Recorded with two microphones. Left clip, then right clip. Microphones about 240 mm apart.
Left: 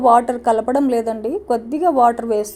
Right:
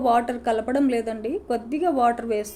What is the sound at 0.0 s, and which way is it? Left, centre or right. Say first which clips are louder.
A woman's voice: left 8 dB; centre.